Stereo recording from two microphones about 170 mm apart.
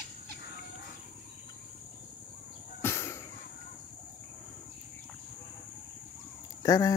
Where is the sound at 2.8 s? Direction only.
15° left (ahead or behind).